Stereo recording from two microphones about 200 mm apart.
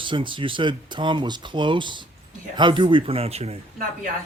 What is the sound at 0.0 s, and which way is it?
Speech, 25° right (ahead or behind).